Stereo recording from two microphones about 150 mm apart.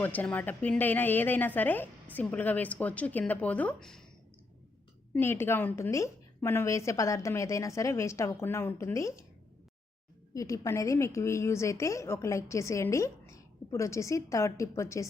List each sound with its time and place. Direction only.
0.0 s a woman's voice: 10° left (ahead or behind)
5.1 s a woman's voice: 15° left (ahead or behind)
10.3 s a woman's voice: 20° left (ahead or behind)